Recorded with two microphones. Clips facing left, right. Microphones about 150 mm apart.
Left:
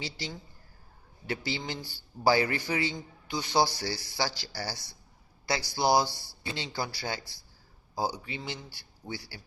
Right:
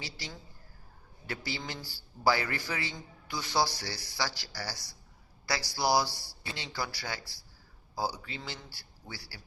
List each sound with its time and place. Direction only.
0.0 s a man's voice: 25° left (ahead or behind)
1.5 s a man's voice: 25° left (ahead or behind)